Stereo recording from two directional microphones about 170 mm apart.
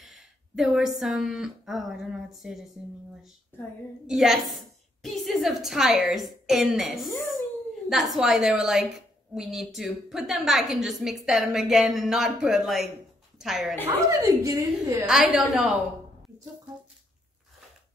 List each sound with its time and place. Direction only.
0.0 s a woman's voice: centre (ahead or behind)
4.1 s a woman's voice: centre (ahead or behind)
7.9 s a woman's voice: centre (ahead or behind)
14.0 s a woman's voice: 20° right (ahead or behind)
15.0 s a woman's voice: 5° right (ahead or behind)